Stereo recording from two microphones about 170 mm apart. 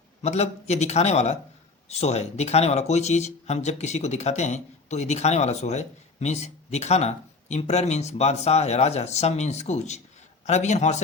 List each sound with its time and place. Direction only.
0.2 s a man's voice: 40° left (ahead or behind)